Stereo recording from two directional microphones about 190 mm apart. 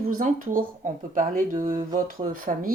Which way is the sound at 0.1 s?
45° right (ahead or behind).